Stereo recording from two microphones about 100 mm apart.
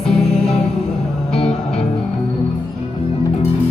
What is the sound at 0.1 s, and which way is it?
Music, 5° left (ahead or behind).